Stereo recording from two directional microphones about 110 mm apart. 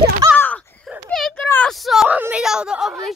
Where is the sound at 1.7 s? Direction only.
Centre (ahead or behind).